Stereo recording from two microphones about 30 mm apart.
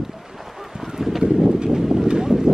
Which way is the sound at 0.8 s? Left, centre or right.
Centre.